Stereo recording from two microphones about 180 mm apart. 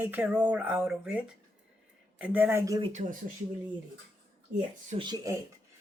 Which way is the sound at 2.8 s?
40° right (ahead or behind).